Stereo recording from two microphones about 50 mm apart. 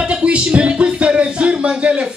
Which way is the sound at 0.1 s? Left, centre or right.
Right.